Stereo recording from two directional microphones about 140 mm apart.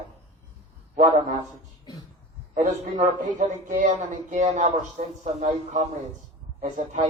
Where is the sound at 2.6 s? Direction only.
55° right (ahead or behind).